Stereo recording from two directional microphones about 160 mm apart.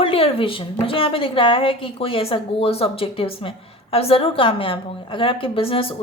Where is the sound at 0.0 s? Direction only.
35° left (ahead or behind).